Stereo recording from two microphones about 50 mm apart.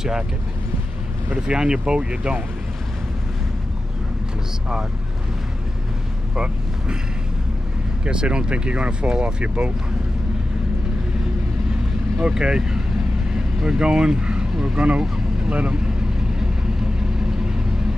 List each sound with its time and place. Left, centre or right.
1.5 s speech: centre
6.3 s speech: centre
8.0 s speech: centre
12.2 s speech: centre